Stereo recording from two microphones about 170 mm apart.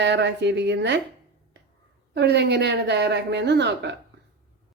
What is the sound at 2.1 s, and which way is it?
Speech, 85° right.